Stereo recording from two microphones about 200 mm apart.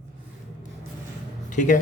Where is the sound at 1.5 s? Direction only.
40° left (ahead or behind).